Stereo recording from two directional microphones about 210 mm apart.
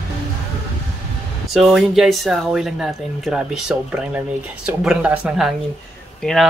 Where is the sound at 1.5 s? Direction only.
Centre (ahead or behind).